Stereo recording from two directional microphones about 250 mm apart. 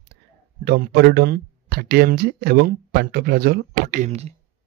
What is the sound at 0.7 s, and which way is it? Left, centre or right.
Speech, right.